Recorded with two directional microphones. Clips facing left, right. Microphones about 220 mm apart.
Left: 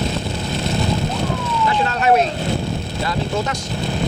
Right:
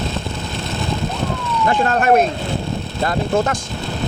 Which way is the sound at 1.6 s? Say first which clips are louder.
Right 2 dB; 50° right (ahead or behind).